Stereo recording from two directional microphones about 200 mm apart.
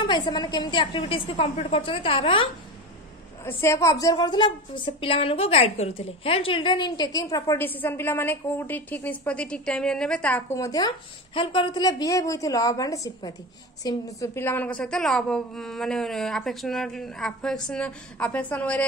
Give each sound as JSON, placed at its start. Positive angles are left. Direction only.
{"t": 0.0, "sound": "a woman's voice", "side_deg": 25}
{"t": 3.4, "sound": "a woman's voice", "side_deg": 15}